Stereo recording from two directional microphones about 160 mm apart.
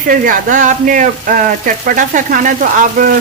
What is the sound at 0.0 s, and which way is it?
Frying, 60° right (ahead or behind).